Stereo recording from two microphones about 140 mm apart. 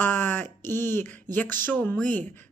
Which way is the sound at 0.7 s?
15° left (ahead or behind).